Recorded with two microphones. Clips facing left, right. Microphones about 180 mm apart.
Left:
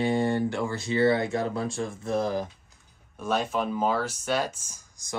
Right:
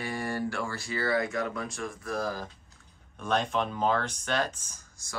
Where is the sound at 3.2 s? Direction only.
5° left (ahead or behind).